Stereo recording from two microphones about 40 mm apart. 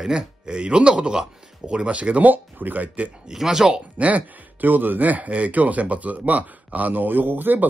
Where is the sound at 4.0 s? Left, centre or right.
Right.